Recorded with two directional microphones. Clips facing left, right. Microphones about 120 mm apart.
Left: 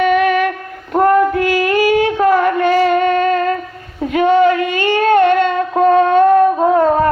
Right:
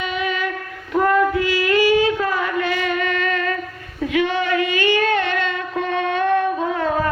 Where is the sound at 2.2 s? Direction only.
50° left (ahead or behind).